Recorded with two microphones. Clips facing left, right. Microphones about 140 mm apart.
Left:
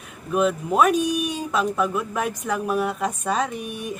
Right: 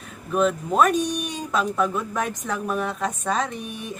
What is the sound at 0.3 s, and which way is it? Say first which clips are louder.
Speech: left 1 dB; 5° left (ahead or behind).